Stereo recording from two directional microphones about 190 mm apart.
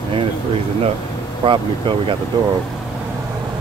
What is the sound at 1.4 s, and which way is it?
Speech, 25° right (ahead or behind).